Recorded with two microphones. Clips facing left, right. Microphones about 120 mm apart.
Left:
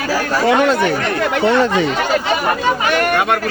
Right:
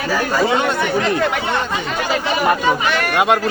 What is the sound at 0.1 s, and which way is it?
Speech, 90° left.